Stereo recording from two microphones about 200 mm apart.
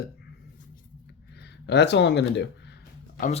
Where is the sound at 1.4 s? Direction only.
60° left (ahead or behind).